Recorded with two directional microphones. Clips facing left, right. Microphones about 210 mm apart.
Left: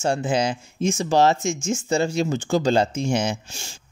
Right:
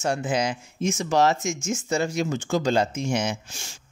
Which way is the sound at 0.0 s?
30° left (ahead or behind).